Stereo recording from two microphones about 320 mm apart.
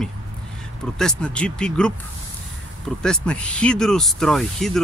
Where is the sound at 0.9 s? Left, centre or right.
Centre.